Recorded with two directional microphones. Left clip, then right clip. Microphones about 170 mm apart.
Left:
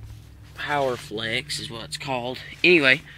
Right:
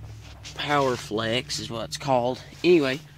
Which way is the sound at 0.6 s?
45° right (ahead or behind).